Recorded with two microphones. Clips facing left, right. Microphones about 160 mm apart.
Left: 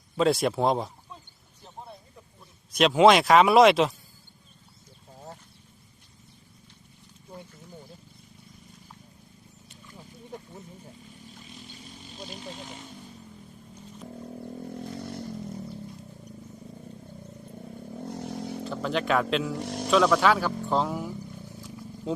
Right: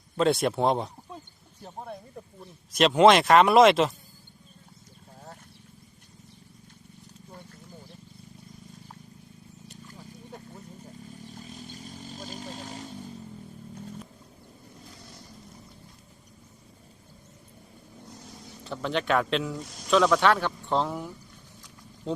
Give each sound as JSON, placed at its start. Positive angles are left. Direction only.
{"t": 0.2, "sound": "speech", "side_deg": 0}
{"t": 2.7, "sound": "speech", "side_deg": 0}
{"t": 11.3, "sound": "vehicle", "side_deg": -40}
{"t": 12.5, "sound": "music", "side_deg": -40}
{"t": 14.8, "sound": "motorcycle", "side_deg": 60}
{"t": 18.0, "sound": "vehicle", "side_deg": 60}
{"t": 18.6, "sound": "speech", "side_deg": 0}
{"t": 19.5, "sound": "speech", "side_deg": 65}
{"t": 19.9, "sound": "speech", "side_deg": 0}
{"t": 21.6, "sound": "wild animals", "side_deg": 5}